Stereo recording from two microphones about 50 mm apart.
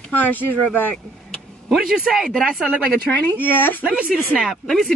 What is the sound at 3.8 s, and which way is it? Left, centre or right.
Speech, centre.